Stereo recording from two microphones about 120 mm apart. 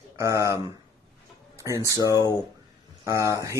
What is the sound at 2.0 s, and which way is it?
Speech, 30° left (ahead or behind).